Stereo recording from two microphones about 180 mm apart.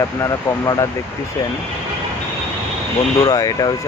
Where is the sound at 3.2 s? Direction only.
20° left (ahead or behind).